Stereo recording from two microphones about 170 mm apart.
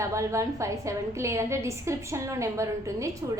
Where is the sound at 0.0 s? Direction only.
15° right (ahead or behind).